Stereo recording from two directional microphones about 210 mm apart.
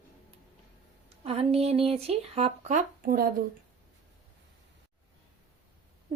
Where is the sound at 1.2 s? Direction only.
30° right (ahead or behind).